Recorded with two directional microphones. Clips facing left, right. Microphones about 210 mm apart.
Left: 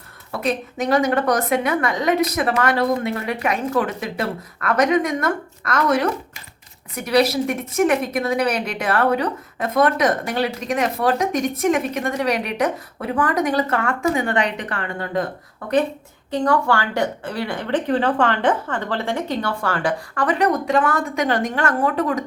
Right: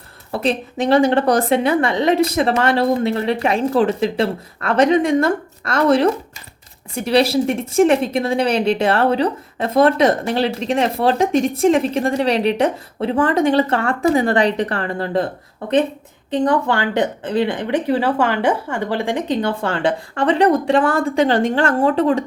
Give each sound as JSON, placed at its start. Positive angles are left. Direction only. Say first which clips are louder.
{"t": 0.3, "sound": "a woman's voice", "louder": "right 3 dB", "side_deg": -30}
{"t": 16.3, "sound": "a woman's voice", "louder": "right 2 dB", "side_deg": -20}